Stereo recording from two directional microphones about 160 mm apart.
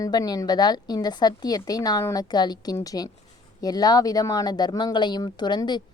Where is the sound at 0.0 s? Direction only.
25° left (ahead or behind).